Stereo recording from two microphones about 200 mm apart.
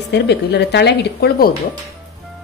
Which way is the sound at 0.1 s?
60° left (ahead or behind).